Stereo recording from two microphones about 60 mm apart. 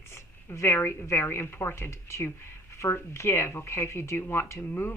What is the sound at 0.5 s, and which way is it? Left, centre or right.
Speech, left.